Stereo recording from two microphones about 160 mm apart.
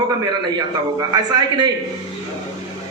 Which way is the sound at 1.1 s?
25° right (ahead or behind).